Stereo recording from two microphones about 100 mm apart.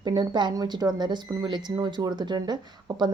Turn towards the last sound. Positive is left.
turn(degrees=-45)  # may be behind; listen again after turning